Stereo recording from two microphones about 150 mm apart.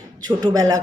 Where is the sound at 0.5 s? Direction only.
25° right (ahead or behind).